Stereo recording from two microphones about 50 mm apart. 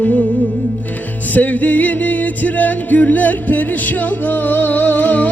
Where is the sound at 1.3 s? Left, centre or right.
Left.